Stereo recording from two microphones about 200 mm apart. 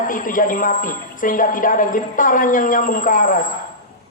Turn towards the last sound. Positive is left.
turn(degrees=40)  # may be behind; listen again after turning